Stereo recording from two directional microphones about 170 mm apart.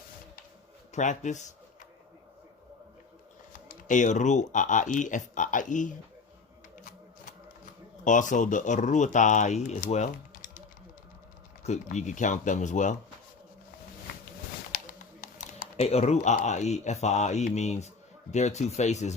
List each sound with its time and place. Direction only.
0.9 s speech: 45° left (ahead or behind)
3.8 s speech: 45° left (ahead or behind)
8.0 s speech: 50° left (ahead or behind)
11.6 s speech: 40° left (ahead or behind)
14.8 s a sound: 55° left (ahead or behind)
15.8 s speech: 40° left (ahead or behind)